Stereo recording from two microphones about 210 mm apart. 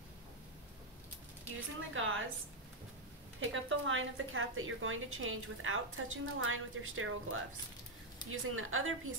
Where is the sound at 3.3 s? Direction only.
65° right (ahead or behind).